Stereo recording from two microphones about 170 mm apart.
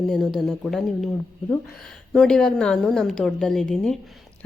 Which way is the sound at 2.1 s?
5° left (ahead or behind).